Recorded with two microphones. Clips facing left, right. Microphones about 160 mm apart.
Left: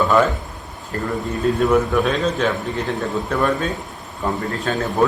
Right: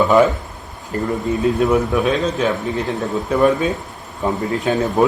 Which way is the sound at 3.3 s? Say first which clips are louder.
Right 6 dB; 15° right (ahead or behind).